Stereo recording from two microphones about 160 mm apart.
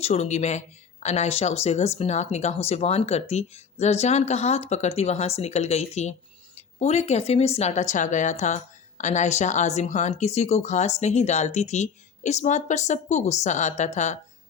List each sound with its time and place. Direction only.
0.0 s a woman's voice: 45° left (ahead or behind)